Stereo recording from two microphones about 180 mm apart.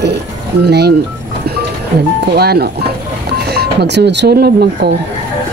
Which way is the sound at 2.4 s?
60° right (ahead or behind).